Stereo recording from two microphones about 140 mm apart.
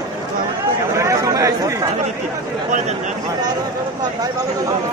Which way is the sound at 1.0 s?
20° right (ahead or behind).